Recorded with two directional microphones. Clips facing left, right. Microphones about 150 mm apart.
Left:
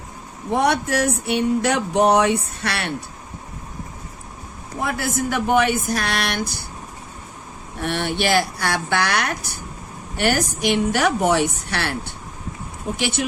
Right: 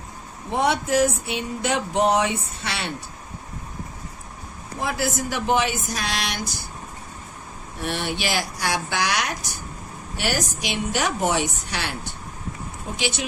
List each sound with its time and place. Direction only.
0.5 s a sound: 70° left (ahead or behind)
4.8 s a woman's voice: 60° left (ahead or behind)
7.8 s a woman's voice: 60° left (ahead or behind)